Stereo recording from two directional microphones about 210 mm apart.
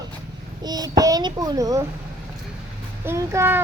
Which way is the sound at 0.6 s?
20° right (ahead or behind).